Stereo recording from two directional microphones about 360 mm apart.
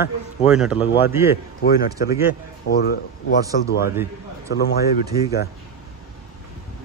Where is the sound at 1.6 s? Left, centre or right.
Left.